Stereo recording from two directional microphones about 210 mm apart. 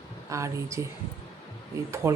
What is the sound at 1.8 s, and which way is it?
Speech, 15° right (ahead or behind).